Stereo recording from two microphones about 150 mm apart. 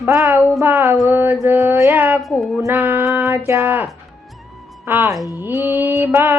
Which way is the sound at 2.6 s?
10° right (ahead or behind).